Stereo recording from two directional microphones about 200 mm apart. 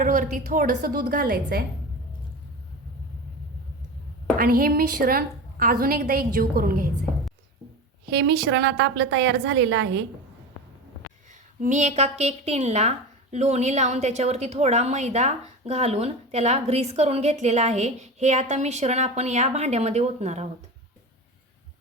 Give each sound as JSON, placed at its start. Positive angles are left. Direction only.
{"t": 0.0, "sound": "a woman's voice", "side_deg": -40}
{"t": 4.4, "sound": "a woman's voice", "side_deg": -45}
{"t": 8.1, "sound": "a woman's voice", "side_deg": -60}
{"t": 11.6, "sound": "a woman's voice", "side_deg": -35}